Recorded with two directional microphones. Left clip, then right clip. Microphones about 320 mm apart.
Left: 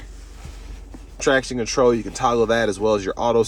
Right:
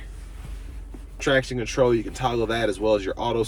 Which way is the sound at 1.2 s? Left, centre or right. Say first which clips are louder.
Left 3 dB; centre.